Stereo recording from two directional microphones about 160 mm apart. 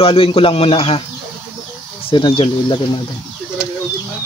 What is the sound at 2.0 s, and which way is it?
Speech, 35° left (ahead or behind).